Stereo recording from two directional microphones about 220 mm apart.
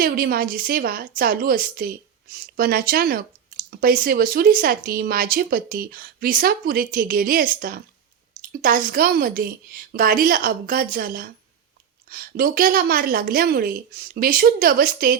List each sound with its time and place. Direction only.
0.0 s speech: 40° right (ahead or behind)